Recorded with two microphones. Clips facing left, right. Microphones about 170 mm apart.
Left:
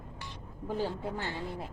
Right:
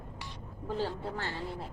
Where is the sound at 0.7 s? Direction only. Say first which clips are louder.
Left 1 dB; 15° left (ahead or behind).